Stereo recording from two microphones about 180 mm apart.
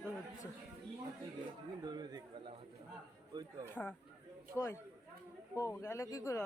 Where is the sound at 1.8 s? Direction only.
25° right (ahead or behind).